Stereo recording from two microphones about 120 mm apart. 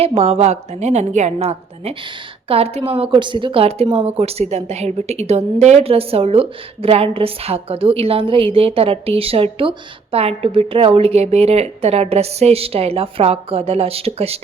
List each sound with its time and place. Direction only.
0.0 s a woman's voice: 55° right (ahead or behind)